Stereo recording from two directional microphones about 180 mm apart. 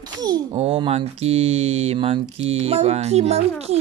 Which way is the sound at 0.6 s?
35° right (ahead or behind).